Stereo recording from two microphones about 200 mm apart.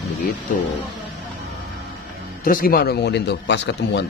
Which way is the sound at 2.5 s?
45° left (ahead or behind).